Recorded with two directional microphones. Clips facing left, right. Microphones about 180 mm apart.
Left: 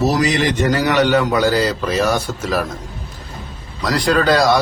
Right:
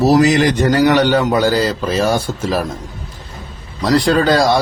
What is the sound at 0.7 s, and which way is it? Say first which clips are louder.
A man's voice: right 3 dB; 30° right (ahead or behind).